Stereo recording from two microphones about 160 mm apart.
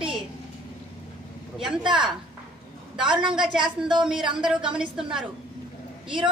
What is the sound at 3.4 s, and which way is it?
A woman's voice, 5° right (ahead or behind).